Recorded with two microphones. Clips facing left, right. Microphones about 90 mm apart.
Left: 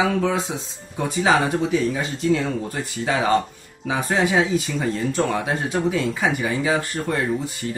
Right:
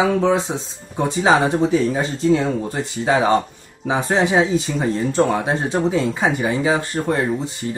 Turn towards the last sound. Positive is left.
turn(degrees=-25)  # may be behind; listen again after turning